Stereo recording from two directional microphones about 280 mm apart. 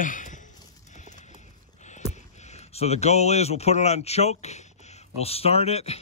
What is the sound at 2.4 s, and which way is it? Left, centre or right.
Speech, left.